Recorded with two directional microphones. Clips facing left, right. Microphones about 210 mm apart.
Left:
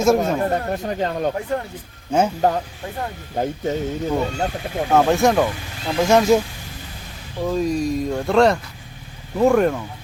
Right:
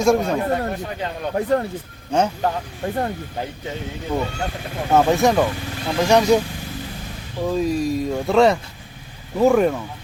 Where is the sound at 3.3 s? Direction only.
45° left (ahead or behind).